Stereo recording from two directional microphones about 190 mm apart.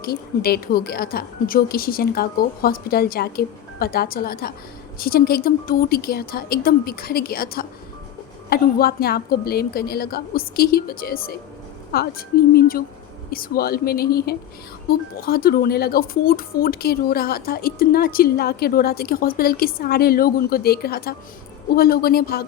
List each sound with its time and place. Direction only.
0.0 s speech: 55° left (ahead or behind)